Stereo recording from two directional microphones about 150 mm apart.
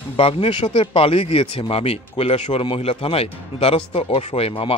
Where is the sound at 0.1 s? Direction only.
40° left (ahead or behind).